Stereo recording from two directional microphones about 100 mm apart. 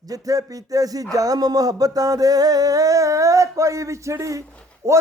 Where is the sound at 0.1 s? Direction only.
35° right (ahead or behind).